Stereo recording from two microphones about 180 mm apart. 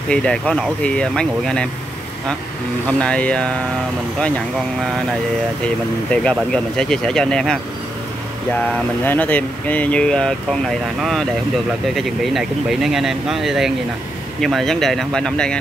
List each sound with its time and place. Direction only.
0.1 s speech: 5° left (ahead or behind)
2.9 s speech: 5° left (ahead or behind)
6.2 s speech: 5° left (ahead or behind)
8.5 s speech: 10° left (ahead or behind)